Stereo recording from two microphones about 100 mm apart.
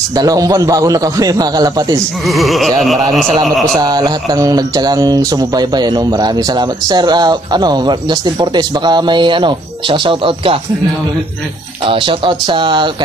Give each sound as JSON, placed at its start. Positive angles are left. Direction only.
{"t": 0.1, "sound": "a man's voice", "side_deg": -40}
{"t": 2.2, "sound": "a sound", "side_deg": 0}
{"t": 3.8, "sound": "speech", "side_deg": -45}
{"t": 11.8, "sound": "speech", "side_deg": -60}